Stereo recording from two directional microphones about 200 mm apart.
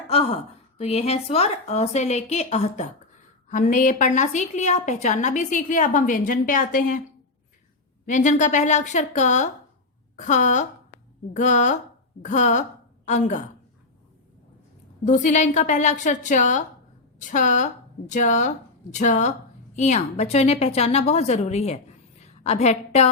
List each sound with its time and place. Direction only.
0.1 s a woman's voice: 30° left (ahead or behind)
8.0 s a woman's voice: 40° left (ahead or behind)
15.0 s a woman's voice: 40° left (ahead or behind)